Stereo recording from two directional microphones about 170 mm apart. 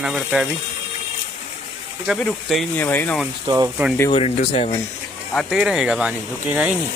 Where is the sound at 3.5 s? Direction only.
30° right (ahead or behind).